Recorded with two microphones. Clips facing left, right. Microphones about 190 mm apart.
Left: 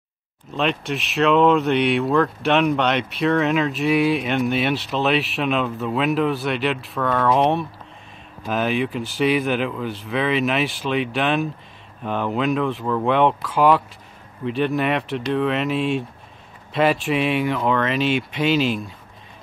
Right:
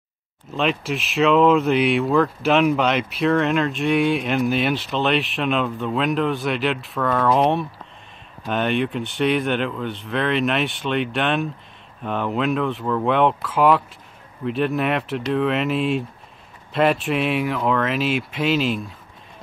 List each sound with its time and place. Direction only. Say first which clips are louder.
0.5 s speech: even; centre (ahead or behind)